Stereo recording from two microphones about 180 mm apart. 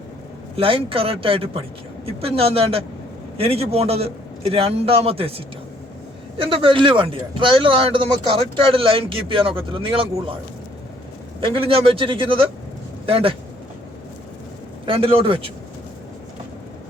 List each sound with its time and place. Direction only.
0.5 s a man's voice: 30° right (ahead or behind)
6.3 s speech: 30° right (ahead or behind)
11.3 s speech: 30° right (ahead or behind)
14.8 s a man's voice: 30° right (ahead or behind)